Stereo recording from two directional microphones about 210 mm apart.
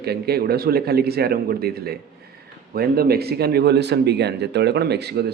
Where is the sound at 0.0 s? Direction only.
50° right (ahead or behind).